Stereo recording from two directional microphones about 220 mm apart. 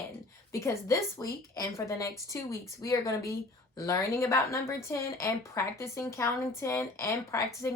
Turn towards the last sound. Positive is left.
turn(degrees=15)  # may be behind; listen again after turning